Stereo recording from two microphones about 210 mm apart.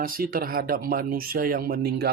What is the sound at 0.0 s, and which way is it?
Speech, 45° right (ahead or behind).